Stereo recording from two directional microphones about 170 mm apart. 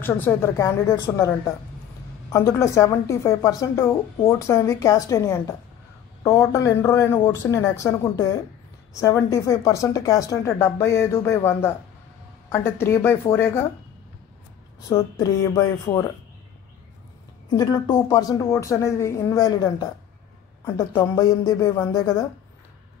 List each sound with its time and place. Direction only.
0.0 s a woman's voice: 10° left (ahead or behind)
2.3 s a woman's voice: 15° left (ahead or behind)
14.9 s speech: 20° left (ahead or behind)
17.5 s speech: 25° left (ahead or behind)